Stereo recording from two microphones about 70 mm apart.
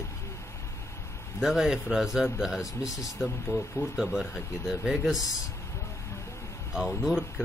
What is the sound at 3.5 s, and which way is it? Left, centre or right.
Speech, centre.